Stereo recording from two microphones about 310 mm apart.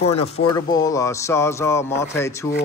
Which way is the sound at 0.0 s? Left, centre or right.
Left.